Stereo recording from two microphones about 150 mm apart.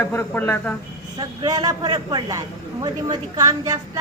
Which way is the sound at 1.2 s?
25° right (ahead or behind).